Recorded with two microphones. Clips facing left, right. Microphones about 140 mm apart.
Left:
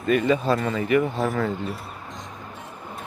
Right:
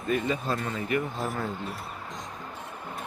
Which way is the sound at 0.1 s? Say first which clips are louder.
Left 7 dB; 90° left.